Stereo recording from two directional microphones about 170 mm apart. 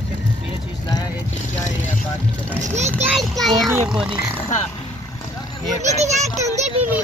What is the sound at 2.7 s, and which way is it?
Speech, 40° right (ahead or behind).